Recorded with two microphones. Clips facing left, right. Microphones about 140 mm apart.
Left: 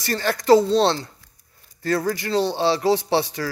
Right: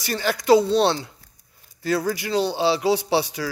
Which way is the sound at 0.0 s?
5° right (ahead or behind).